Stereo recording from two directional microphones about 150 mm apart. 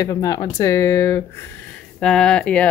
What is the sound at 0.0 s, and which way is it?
Speech, 25° left (ahead or behind).